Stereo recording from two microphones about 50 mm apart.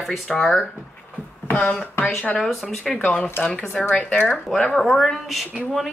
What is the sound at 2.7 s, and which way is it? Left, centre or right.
Speech, centre.